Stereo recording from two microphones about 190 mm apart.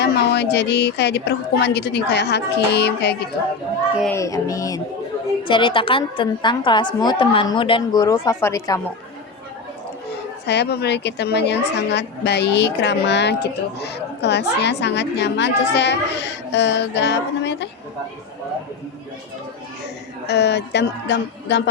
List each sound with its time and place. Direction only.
0.0 s a woman's voice: 60° left (ahead or behind)
4.1 s child singing: 15° left (ahead or behind)
5.4 s a woman's voice: 25° left (ahead or behind)
10.4 s a woman's voice: 60° left (ahead or behind)
20.2 s a woman's voice: 65° left (ahead or behind)